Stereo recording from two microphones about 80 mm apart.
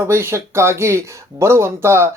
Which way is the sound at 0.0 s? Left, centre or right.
Right.